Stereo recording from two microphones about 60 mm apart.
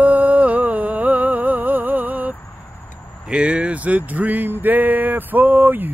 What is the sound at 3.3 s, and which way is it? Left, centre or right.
Speech, centre.